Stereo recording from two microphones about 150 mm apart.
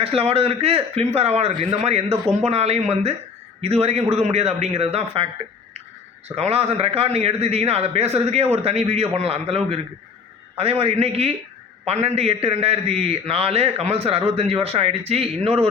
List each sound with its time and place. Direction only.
0.0 s a man's voice: 40° right (ahead or behind)